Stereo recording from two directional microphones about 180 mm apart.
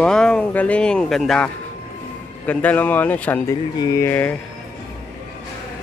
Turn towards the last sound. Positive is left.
turn(degrees=10)  # may be behind; listen again after turning